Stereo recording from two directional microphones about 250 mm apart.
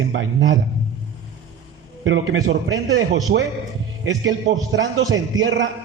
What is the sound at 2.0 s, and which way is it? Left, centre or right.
A man's voice, right.